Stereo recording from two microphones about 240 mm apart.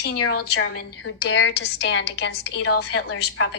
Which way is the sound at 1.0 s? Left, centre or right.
Left.